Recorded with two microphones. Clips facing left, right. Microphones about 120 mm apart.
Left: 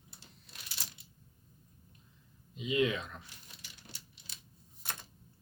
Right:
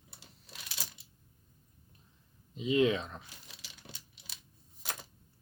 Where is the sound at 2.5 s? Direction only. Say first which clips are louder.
Right 4 dB; 30° right (ahead or behind).